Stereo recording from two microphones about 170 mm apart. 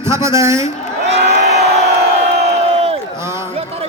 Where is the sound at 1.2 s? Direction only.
75° right (ahead or behind).